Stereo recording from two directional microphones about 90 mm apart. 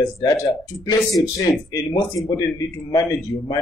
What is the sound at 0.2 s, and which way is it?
Speech, 45° left (ahead or behind).